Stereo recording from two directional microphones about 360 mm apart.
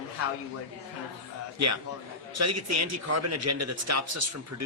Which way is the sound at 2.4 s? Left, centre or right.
Right.